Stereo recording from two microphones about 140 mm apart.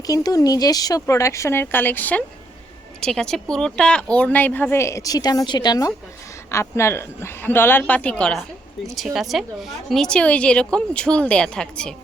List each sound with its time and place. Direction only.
0.1 s a woman's voice: 25° left (ahead or behind); by 11.9 s 5° left (ahead or behind)